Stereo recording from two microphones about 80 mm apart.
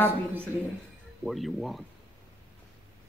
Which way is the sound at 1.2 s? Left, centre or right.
Centre.